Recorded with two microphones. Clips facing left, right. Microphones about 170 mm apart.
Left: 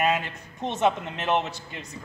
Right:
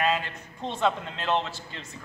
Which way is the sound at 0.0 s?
20° left (ahead or behind).